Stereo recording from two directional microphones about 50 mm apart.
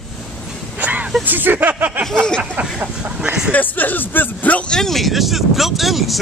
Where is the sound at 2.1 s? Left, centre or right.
Centre.